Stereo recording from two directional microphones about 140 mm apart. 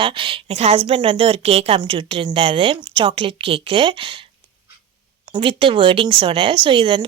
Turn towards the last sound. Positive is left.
turn(degrees=-35)  # may be behind; listen again after turning